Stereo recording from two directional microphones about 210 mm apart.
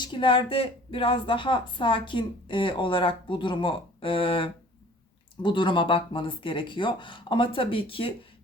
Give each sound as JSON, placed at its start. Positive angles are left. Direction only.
{"t": 0.0, "sound": "speech", "side_deg": 25}